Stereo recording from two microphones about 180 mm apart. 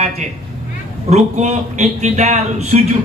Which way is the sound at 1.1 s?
40° right (ahead or behind).